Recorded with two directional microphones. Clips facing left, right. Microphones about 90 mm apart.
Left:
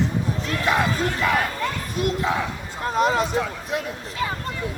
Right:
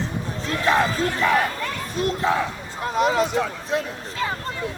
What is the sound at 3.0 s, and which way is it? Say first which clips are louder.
Speech: right 1 dB; 40° left (ahead or behind).